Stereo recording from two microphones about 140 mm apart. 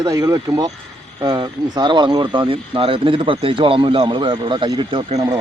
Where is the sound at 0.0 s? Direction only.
25° right (ahead or behind); by 5.2 s 40° right (ahead or behind).